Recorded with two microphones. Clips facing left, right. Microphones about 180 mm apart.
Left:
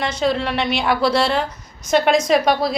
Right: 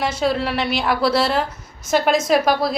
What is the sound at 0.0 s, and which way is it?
A woman's voice, 5° right (ahead or behind).